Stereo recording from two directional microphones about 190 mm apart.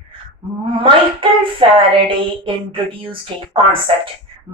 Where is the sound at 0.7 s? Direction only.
25° right (ahead or behind).